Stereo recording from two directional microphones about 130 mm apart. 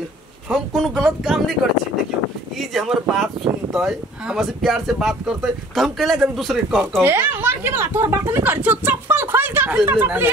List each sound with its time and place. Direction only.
0.5 s speech: centre (ahead or behind)
2.7 s speech: centre (ahead or behind)
7.0 s speech: 15° right (ahead or behind)